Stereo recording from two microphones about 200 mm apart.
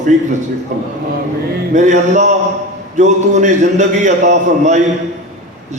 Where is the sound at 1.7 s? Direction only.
35° right (ahead or behind).